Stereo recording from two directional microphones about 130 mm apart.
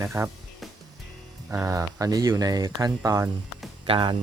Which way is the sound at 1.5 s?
25° right (ahead or behind).